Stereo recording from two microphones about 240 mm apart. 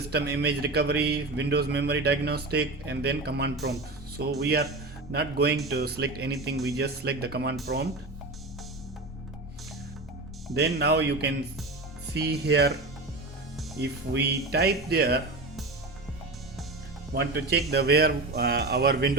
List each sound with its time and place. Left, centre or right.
0.1 s a man's voice: right
10.5 s a man's voice: right
13.7 s speech: right
17.2 s a man's voice: right